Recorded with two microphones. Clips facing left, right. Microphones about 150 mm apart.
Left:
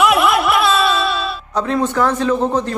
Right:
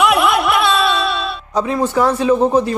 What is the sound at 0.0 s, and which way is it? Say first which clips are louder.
Music: even; centre (ahead or behind).